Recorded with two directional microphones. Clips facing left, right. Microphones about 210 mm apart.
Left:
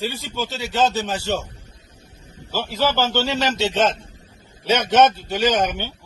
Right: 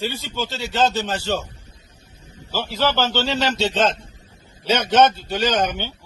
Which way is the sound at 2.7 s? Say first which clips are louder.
Even; 10° left (ahead or behind).